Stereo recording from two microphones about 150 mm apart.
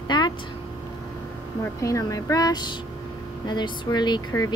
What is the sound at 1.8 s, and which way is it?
Speech, 20° left (ahead or behind).